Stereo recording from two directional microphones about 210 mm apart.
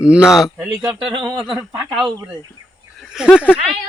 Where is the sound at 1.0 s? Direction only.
25° right (ahead or behind).